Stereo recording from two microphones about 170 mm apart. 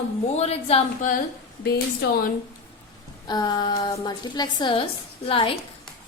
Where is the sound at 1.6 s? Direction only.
70° left (ahead or behind).